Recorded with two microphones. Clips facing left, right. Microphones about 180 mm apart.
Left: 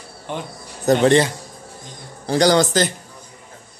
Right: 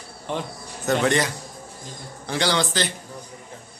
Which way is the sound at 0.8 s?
35° left (ahead or behind).